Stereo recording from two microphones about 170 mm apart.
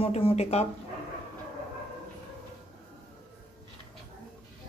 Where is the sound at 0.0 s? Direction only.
35° left (ahead or behind).